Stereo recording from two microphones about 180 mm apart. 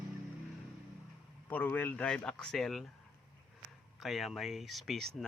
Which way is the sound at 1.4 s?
10° left (ahead or behind).